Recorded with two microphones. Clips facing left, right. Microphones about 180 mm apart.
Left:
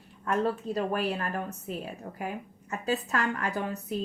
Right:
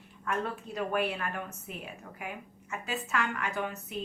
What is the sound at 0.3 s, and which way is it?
Speech, 35° left (ahead or behind).